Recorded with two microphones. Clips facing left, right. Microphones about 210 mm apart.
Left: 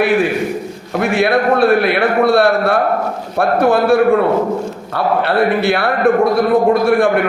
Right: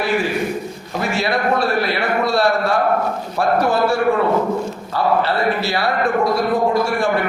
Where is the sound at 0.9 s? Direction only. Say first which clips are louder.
Left 7 dB; 55° left (ahead or behind).